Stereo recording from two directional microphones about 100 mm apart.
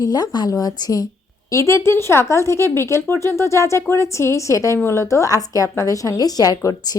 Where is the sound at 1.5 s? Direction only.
30° left (ahead or behind).